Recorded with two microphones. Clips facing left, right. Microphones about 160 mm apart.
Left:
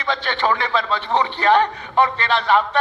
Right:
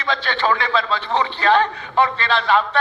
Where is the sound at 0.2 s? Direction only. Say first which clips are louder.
Even; 20° left (ahead or behind).